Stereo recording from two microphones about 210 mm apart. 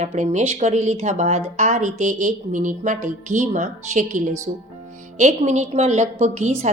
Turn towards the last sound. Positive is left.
turn(degrees=-35)  # may be behind; listen again after turning